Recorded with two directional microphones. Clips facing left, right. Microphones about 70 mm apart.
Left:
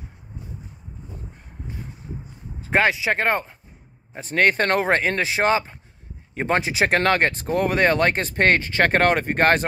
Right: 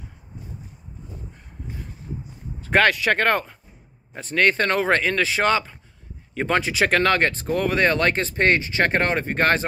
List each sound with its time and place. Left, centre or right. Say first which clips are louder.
2.6 s speech: right 1 dB; centre
4.3 s speech: left 1 dB; left